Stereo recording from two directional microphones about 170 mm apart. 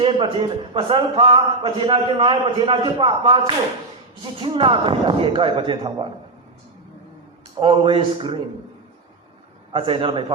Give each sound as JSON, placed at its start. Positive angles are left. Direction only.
{"t": 0.0, "sound": "a man's voice", "side_deg": -30}
{"t": 7.6, "sound": "a man's voice", "side_deg": -30}
{"t": 9.7, "sound": "a man's voice", "side_deg": -30}